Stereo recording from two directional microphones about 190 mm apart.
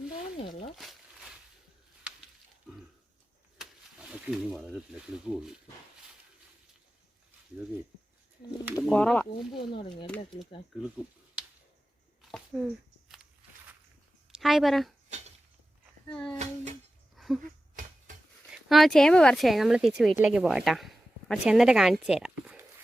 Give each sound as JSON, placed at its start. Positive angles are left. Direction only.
{"t": 0.8, "sound": "a sound", "side_deg": 0}
{"t": 3.6, "sound": "speech", "side_deg": -5}
{"t": 8.7, "sound": "speech", "side_deg": 5}
{"t": 9.6, "sound": "speech", "side_deg": 25}
{"t": 12.5, "sound": "speech", "side_deg": 0}
{"t": 14.3, "sound": "speech", "side_deg": 0}
{"t": 16.1, "sound": "speech", "side_deg": 5}
{"t": 17.2, "sound": "a sound", "side_deg": 0}
{"t": 18.5, "sound": "speech", "side_deg": 0}